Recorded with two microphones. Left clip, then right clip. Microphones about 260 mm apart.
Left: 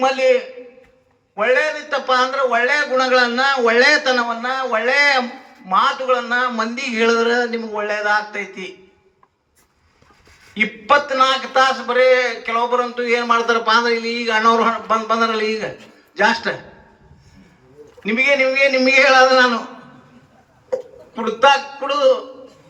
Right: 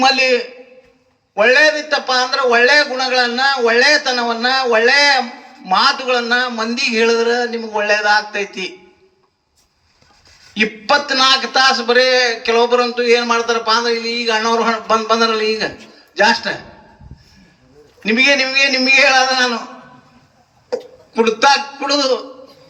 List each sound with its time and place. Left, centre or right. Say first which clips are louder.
0.0 s a man's voice: right 2 dB; right
10.6 s a man's voice: right 1 dB; right
18.0 s a man's voice: right 2 dB; right
20.7 s a sound: right 1 dB; right
21.4 s a man's voice: left 3 dB; right